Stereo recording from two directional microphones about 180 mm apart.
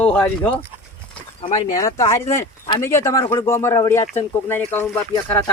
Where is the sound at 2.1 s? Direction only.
15° left (ahead or behind).